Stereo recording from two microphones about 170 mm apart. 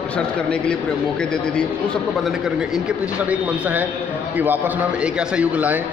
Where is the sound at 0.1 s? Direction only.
5° left (ahead or behind).